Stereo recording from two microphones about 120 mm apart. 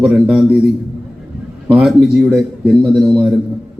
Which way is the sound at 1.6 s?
5° right (ahead or behind).